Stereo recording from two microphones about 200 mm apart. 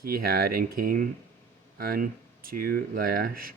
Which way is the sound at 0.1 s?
50° right (ahead or behind).